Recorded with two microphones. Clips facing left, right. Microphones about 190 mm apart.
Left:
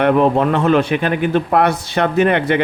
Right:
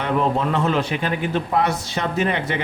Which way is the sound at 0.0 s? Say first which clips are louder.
Left 7 dB; 60° left (ahead or behind).